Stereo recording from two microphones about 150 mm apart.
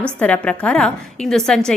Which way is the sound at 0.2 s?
10° left (ahead or behind).